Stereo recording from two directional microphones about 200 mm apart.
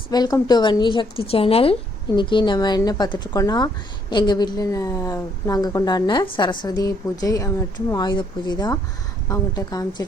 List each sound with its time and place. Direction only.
0.1 s a woman's voice: 20° left (ahead or behind)